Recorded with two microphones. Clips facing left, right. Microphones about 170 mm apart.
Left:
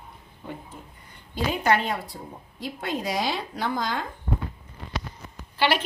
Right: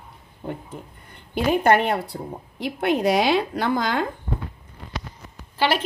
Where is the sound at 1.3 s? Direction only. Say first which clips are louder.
Right 5 dB; 55° right (ahead or behind).